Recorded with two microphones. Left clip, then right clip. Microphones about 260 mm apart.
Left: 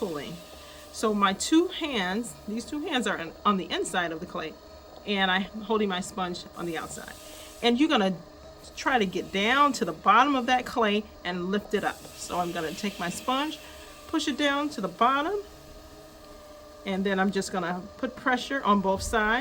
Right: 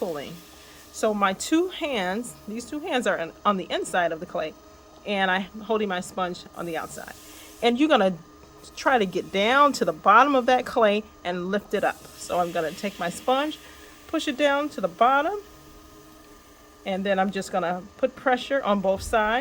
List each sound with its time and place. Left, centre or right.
0.0 s a sound: centre
0.9 s speech: centre
16.8 s speech: centre